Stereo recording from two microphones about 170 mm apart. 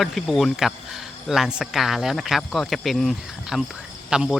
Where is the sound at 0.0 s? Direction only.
Centre (ahead or behind).